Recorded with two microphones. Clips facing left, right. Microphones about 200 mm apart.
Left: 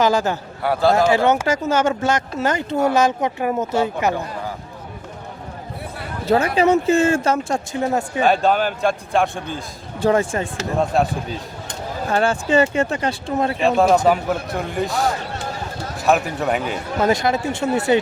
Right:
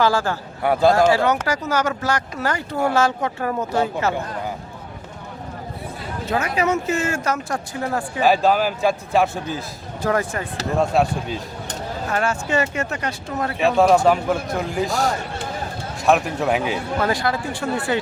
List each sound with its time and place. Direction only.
0.0 s speech: 20° left (ahead or behind)
0.6 s a man's voice: 20° right (ahead or behind)
0.9 s speech: 20° left (ahead or behind)
6.2 s speech: 30° left (ahead or behind)
8.2 s a man's voice: centre (ahead or behind)
10.0 s speech: 25° left (ahead or behind)
10.8 s a man's voice: centre (ahead or behind)
12.1 s speech: 30° left (ahead or behind)
13.6 s a man's voice: centre (ahead or behind)
17.0 s speech: 20° left (ahead or behind)